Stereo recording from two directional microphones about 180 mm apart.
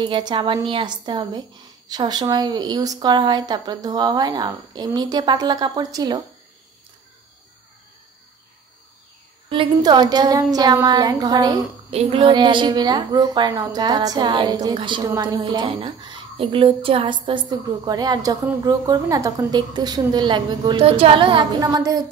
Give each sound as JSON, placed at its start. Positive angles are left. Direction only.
{"t": 0.0, "sound": "a woman's voice", "side_deg": -25}
{"t": 9.5, "sound": "a woman's voice", "side_deg": -25}
{"t": 11.9, "sound": "a woman's voice", "side_deg": -30}